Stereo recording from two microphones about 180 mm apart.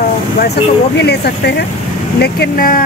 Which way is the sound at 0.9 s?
65° left (ahead or behind).